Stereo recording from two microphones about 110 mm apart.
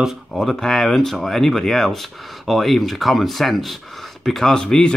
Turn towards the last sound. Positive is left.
turn(degrees=5)  # may be behind; listen again after turning